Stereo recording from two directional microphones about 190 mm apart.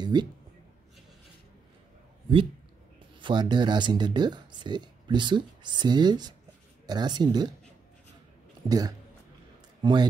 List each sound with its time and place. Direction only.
0.0 s speech: 25° right (ahead or behind)
3.2 s speech: 25° right (ahead or behind)
8.6 s speech: 20° right (ahead or behind)